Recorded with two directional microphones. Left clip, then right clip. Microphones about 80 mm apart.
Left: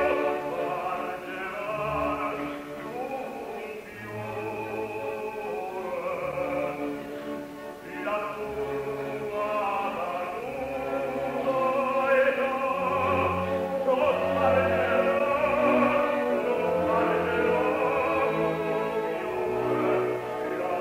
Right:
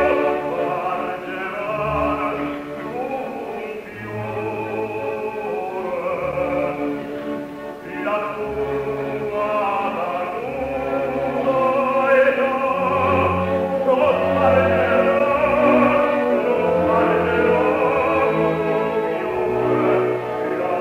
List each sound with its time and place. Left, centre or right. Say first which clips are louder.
0.0 s music: right 7 dB; right
6.0 s music: right 8 dB; right
9.4 s chant: right 7 dB; right
10.9 s music: right 7 dB; right